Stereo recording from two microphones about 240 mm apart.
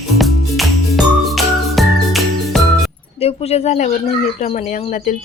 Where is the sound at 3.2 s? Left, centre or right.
Left.